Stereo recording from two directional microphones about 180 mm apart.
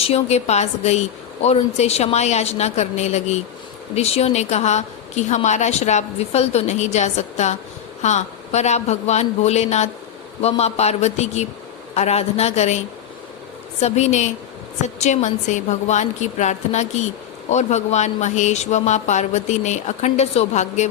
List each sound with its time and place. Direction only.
0.0 s a woman's voice: 35° left (ahead or behind)
13.8 s a woman's voice: 40° left (ahead or behind)